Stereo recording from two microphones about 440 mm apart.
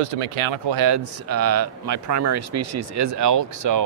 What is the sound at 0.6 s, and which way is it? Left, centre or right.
Speech, right.